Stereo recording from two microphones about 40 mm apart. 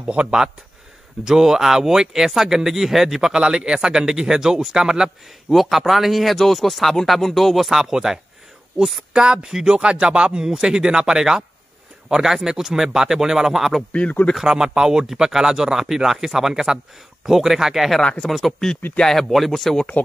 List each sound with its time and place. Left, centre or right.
0.0 s speech: right
1.2 s speech: centre
5.5 s speech: centre
7.8 s speech: centre
9.2 s speech: centre